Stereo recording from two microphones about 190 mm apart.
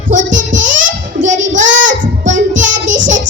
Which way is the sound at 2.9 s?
75° right (ahead or behind).